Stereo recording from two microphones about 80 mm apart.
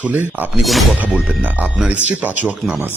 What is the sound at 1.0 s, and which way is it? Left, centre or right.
A man's voice, centre.